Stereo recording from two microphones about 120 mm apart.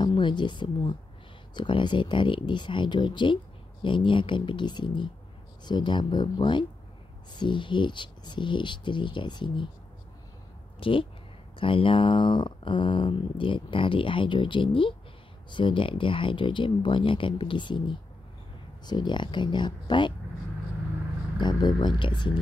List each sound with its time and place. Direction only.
0.0 s speech: 40° left (ahead or behind)
10.8 s speech: 45° left (ahead or behind)
21.4 s speech: 40° left (ahead or behind)